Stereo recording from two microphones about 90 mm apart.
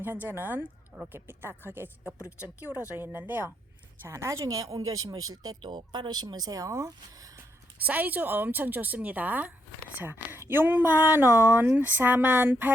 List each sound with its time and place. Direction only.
0.0 s a woman's voice: 20° right (ahead or behind); by 7.3 s 40° right (ahead or behind)
7.8 s speech: 20° right (ahead or behind)